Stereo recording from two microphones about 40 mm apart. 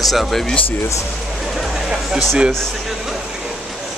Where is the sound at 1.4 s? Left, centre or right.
Centre.